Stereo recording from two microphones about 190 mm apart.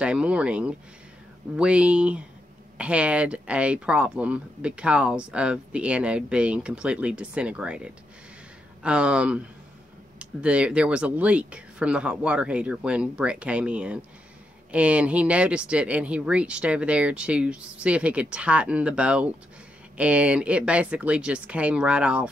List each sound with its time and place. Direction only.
0.0 s speech: 5° right (ahead or behind)